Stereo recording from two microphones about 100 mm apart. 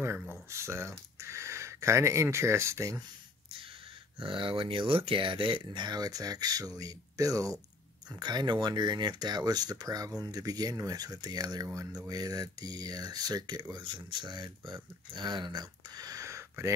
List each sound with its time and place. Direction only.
0.3 s speech: 25° right (ahead or behind)
4.2 s speech: 60° right (ahead or behind); by 16.7 s 30° right (ahead or behind)